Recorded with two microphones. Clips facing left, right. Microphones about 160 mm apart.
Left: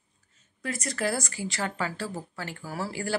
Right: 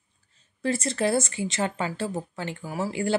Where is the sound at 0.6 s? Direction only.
30° right (ahead or behind).